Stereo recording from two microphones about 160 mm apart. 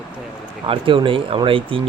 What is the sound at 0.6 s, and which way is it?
Speech, 35° right (ahead or behind).